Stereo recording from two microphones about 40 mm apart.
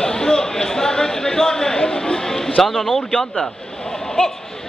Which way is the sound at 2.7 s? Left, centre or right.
Centre.